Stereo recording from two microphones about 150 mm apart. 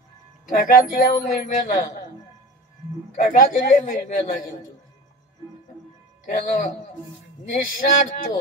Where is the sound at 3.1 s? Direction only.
65° left (ahead or behind).